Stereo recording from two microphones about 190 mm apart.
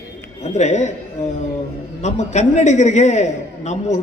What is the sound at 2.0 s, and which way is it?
A man's voice, 40° left (ahead or behind).